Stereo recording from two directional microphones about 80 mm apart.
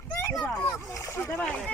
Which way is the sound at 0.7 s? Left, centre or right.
Left.